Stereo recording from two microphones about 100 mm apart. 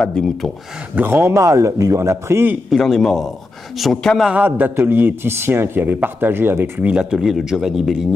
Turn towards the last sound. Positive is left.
turn(degrees=-5)  # may be behind; listen again after turning